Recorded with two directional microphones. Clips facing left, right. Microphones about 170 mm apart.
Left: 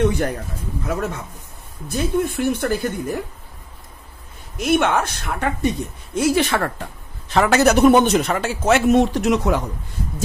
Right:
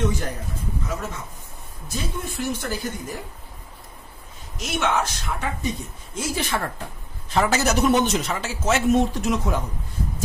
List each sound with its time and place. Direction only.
0.0 s a man's voice: 60° left (ahead or behind)
1.9 s a man's voice: 60° left (ahead or behind)
4.6 s a man's voice: 55° left (ahead or behind); by 9.6 s 75° left (ahead or behind)